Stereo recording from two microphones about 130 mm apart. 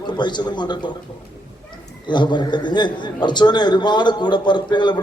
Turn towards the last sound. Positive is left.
turn(degrees=35)  # may be behind; listen again after turning